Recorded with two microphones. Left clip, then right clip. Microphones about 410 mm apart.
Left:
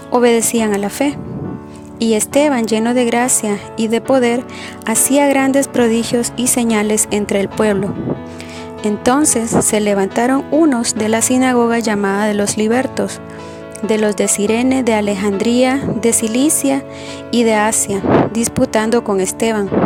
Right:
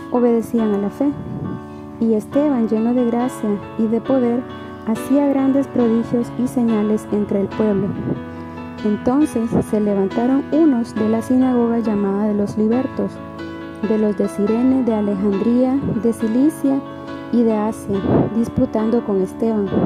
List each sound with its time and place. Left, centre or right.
0.1 s speech: left
9.0 s speech: left